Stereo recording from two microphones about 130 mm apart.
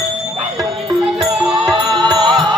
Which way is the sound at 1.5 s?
40° right (ahead or behind).